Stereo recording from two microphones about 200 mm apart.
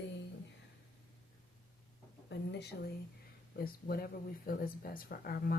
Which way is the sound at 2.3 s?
60° left (ahead or behind).